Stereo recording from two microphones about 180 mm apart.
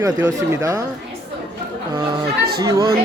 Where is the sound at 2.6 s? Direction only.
20° right (ahead or behind).